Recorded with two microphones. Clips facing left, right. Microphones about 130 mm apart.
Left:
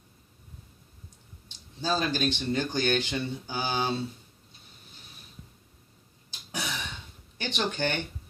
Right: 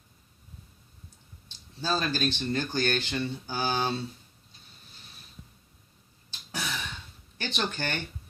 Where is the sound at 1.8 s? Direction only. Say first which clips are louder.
Left 1 dB; 15° left (ahead or behind).